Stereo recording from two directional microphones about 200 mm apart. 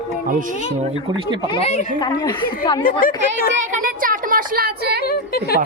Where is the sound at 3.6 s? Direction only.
40° right (ahead or behind).